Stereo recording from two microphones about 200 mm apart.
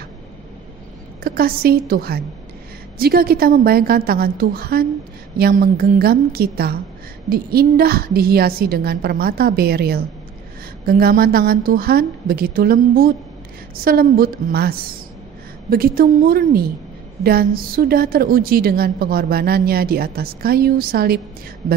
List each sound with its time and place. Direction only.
1.2 s a woman's voice: 50° right (ahead or behind)